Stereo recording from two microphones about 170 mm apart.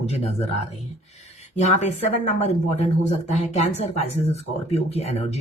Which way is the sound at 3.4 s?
40° left (ahead or behind).